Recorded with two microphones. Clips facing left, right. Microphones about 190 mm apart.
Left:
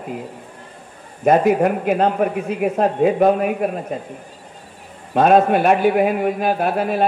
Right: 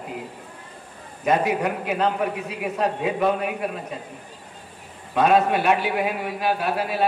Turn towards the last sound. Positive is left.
turn(degrees=50)  # may be behind; listen again after turning